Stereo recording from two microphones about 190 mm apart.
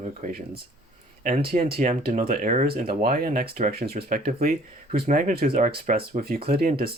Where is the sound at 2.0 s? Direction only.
50° right (ahead or behind).